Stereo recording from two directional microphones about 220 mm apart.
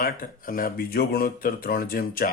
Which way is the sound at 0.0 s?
40° left (ahead or behind).